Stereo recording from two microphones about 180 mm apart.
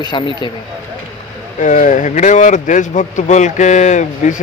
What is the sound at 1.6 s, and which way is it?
Speech, 45° left (ahead or behind).